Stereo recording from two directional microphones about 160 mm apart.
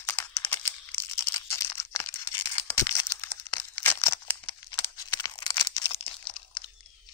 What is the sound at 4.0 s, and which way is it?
Crumpling, 15° left (ahead or behind).